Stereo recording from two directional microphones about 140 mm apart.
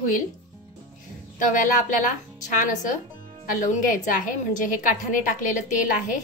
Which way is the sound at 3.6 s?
65° left (ahead or behind).